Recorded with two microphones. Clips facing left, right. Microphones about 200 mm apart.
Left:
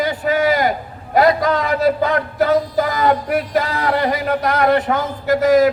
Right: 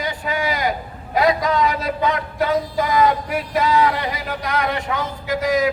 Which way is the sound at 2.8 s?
50° left (ahead or behind).